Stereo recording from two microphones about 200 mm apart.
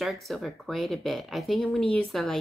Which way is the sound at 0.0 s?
Centre (ahead or behind).